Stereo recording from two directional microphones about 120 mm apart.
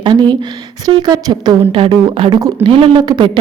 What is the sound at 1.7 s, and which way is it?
A woman's voice, 50° right (ahead or behind).